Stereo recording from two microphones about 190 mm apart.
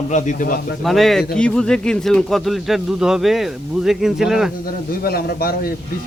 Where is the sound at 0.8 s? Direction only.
Centre (ahead or behind).